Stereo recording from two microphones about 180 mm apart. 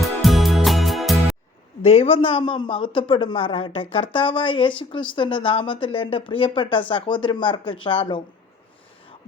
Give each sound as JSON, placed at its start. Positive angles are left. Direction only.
{"t": 0.2, "sound": "music", "side_deg": 0}
{"t": 1.8, "sound": "speech", "side_deg": 35}